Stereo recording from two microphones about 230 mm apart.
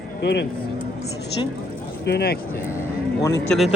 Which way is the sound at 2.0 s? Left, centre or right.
Left.